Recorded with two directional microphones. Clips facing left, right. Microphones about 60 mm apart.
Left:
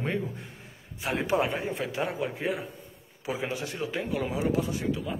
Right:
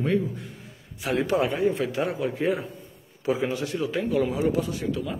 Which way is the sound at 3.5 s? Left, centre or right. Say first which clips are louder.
Right 5 dB; left.